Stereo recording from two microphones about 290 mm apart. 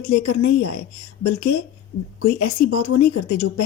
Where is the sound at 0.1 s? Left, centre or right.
Left.